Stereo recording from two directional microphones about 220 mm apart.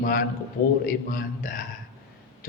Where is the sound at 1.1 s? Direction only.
40° left (ahead or behind).